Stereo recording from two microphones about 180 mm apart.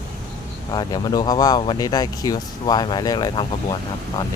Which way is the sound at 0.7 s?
25° left (ahead or behind).